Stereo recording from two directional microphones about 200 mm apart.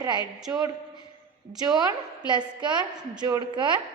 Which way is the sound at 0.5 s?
10° right (ahead or behind).